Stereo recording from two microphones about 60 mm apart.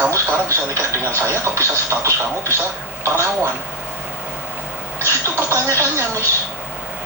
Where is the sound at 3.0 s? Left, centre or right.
Right.